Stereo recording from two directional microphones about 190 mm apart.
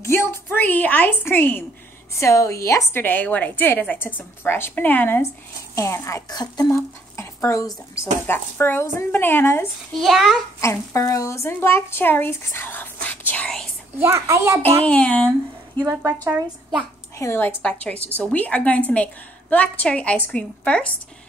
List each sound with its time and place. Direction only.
0.0 s a woman's voice: 15° left (ahead or behind)
10.0 s a child's voice: centre (ahead or behind)
10.6 s a woman's voice: 15° left (ahead or behind)
13.9 s a woman's voice: 10° right (ahead or behind)
14.9 s a woman's voice: 5° left (ahead or behind)
15.8 s a woman's voice: 10° right (ahead or behind)
17.2 s a woman's voice: 15° left (ahead or behind)